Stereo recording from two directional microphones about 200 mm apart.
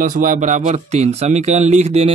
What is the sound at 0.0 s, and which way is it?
Speech, 40° right (ahead or behind).